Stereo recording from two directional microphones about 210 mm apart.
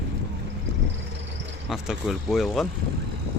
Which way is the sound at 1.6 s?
Centre (ahead or behind).